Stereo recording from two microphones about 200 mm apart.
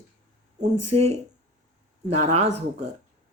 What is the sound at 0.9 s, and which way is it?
Speech, 30° right (ahead or behind).